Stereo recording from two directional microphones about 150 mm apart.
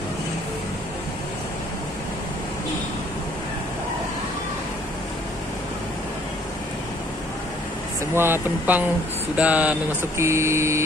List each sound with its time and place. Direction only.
8.1 s mantra: 15° right (ahead or behind)